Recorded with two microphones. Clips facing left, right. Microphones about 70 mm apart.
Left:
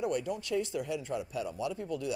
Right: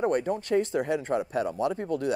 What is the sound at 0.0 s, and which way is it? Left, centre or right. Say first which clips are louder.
Speech: right 7 dB; right.